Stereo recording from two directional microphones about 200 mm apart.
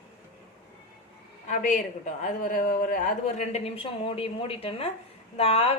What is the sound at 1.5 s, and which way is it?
A woman's voice, 40° left (ahead or behind).